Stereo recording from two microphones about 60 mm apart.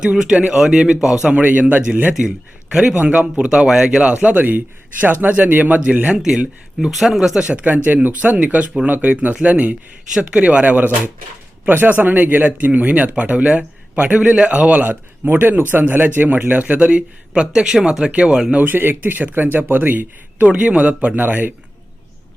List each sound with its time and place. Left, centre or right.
0.0 s speech: centre
1.4 s speech: right
2.1 s speech: centre
6.1 s speech: centre
18.5 s speech: right